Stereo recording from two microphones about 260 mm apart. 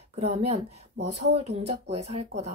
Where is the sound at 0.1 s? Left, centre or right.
Right.